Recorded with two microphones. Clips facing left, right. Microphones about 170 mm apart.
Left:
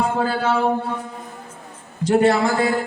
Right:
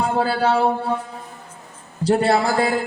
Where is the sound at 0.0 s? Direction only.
35° right (ahead or behind).